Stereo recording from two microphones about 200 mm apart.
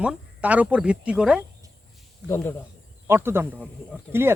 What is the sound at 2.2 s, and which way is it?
Speech, 10° left (ahead or behind).